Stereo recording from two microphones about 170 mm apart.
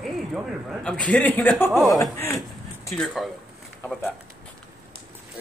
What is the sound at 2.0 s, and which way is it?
Speech, 15° left (ahead or behind).